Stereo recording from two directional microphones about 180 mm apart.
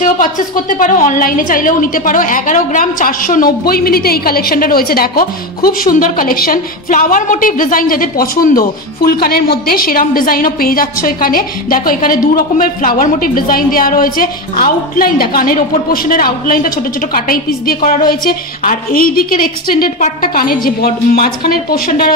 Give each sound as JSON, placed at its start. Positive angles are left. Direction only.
{"t": 0.0, "sound": "a woman's voice", "side_deg": 50}